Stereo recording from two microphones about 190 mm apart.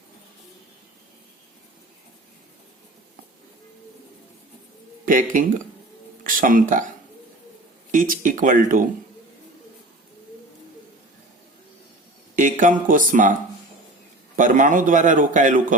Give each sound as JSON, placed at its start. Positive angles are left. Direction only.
{"t": 5.0, "sound": "a man's voice", "side_deg": -45}
{"t": 7.9, "sound": "a man's voice", "side_deg": -45}
{"t": 12.4, "sound": "a man's voice", "side_deg": -45}
{"t": 14.3, "sound": "a man's voice", "side_deg": -40}